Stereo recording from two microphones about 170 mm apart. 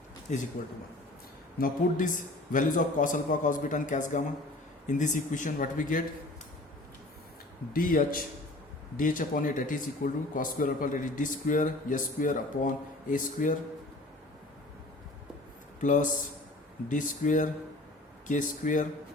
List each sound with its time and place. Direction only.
0.3 s a man's voice: 45° left (ahead or behind)
1.5 s a man's voice: 55° left (ahead or behind)
7.7 s a man's voice: 55° left (ahead or behind)
15.8 s a man's voice: 50° left (ahead or behind)